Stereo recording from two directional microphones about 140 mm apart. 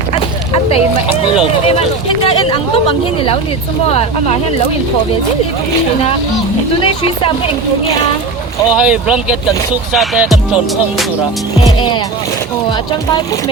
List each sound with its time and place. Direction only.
1.7 s speech: 45° left (ahead or behind)
6.7 s speech: 40° left (ahead or behind)
8.8 s speech: 5° right (ahead or behind)
9.9 s music: centre (ahead or behind)